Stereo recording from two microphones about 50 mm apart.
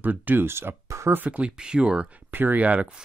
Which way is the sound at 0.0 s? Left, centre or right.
Right.